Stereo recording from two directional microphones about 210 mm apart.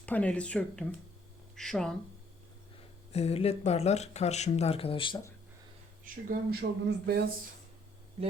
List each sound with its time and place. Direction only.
0.0 s speech: 5° left (ahead or behind)
3.1 s speech: 30° left (ahead or behind)
6.1 s speech: 40° right (ahead or behind)
6.5 s speech: 50° right (ahead or behind)